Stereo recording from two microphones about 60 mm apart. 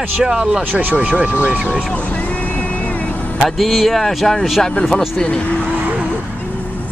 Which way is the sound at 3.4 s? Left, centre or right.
Centre.